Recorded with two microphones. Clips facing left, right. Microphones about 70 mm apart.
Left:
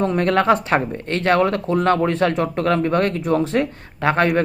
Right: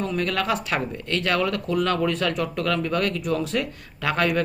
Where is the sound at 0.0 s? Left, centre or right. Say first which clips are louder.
Left 8 dB; left.